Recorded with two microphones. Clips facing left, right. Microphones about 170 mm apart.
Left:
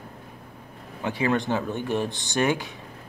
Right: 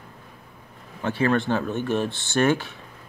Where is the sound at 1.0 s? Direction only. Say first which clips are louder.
Right 2 dB; 15° left (ahead or behind).